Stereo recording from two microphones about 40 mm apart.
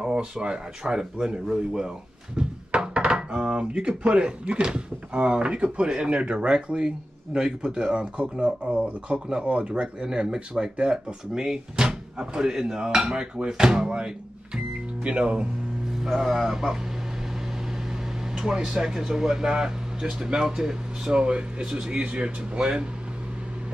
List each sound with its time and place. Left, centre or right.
0.0 s speech: right
2.3 s thunk: right
3.3 s speech: right
15.9 s speech: centre
18.3 s speech: centre